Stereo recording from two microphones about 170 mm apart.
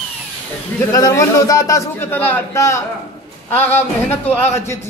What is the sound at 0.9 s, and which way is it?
Speech, 20° left (ahead or behind).